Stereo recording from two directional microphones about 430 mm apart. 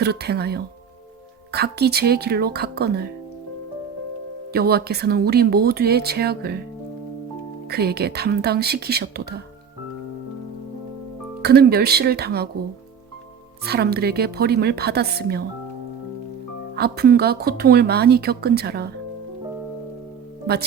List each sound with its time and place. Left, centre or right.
0.0 s speech: right
4.5 s speech: right
7.7 s speech: right
11.4 s speech: right
13.7 s speech: right
16.7 s speech: right
20.5 s speech: right